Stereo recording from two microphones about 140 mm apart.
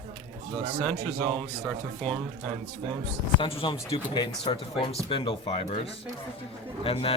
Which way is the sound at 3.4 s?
40° left (ahead or behind).